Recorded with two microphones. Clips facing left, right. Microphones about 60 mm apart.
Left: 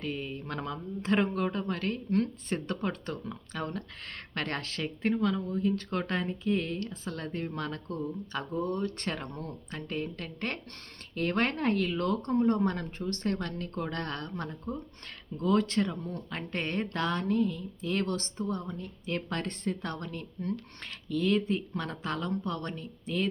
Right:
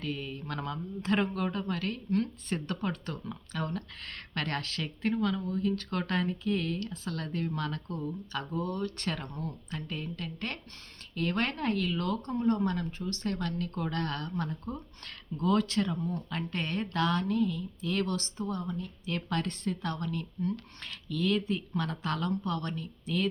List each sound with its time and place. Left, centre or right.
0.0 s speech: left